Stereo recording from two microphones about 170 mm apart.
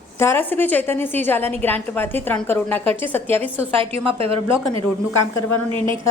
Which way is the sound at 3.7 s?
35° right (ahead or behind).